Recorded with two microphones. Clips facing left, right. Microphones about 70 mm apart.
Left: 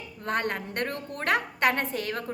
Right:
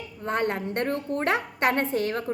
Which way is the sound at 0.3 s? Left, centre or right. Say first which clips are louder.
Right 3 dB; right.